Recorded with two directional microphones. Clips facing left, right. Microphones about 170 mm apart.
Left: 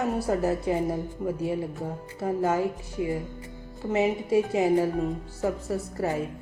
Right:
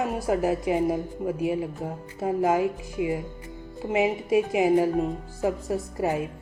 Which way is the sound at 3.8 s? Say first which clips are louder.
Right 1 dB; 15° right (ahead or behind).